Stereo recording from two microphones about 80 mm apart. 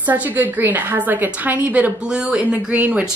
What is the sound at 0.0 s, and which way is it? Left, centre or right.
A woman's voice, right.